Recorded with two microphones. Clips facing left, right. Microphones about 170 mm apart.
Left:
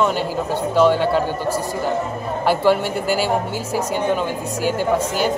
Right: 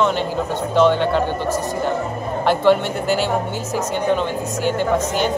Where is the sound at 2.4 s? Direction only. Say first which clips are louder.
Right 1 dB; 5° left (ahead or behind).